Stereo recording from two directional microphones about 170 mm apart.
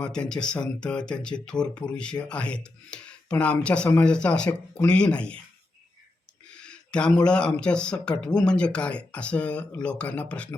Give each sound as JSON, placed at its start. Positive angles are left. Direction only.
{"t": 0.0, "sound": "speech", "side_deg": 5}
{"t": 6.6, "sound": "speech", "side_deg": 5}